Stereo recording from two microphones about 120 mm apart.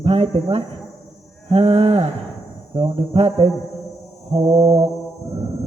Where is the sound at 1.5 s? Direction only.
55° right (ahead or behind).